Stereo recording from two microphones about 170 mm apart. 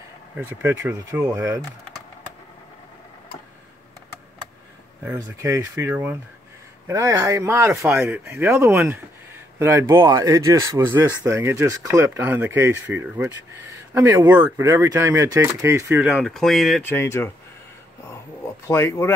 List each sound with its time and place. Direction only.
0.4 s speech: 10° right (ahead or behind)
5.0 s speech: 15° right (ahead or behind)
16.1 s speech: centre (ahead or behind)
16.9 s speech: 15° left (ahead or behind)
18.7 s speech: 15° left (ahead or behind)